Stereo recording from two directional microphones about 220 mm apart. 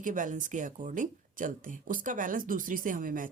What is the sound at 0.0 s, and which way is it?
Speech, 35° right (ahead or behind).